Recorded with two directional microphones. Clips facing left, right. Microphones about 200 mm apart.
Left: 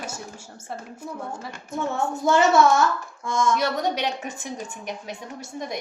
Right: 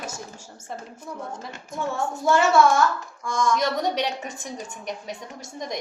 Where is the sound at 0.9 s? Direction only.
10° left (ahead or behind).